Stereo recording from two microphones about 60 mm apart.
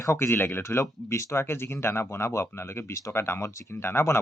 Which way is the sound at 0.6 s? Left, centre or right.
Left.